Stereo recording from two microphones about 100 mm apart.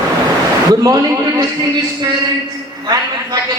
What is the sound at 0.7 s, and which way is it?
Speech, 40° right (ahead or behind).